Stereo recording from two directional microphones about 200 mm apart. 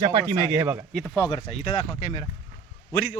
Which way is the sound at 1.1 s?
20° left (ahead or behind).